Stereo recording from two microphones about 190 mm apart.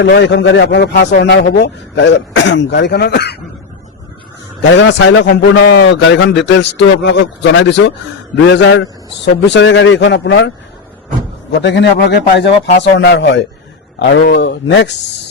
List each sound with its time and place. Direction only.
0.0 s speech: 70° left (ahead or behind)
4.7 s speech: 70° left (ahead or behind)
11.5 s a man's voice: 65° left (ahead or behind)